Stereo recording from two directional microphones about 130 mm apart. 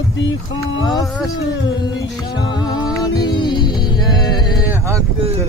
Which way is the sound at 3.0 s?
35° left (ahead or behind).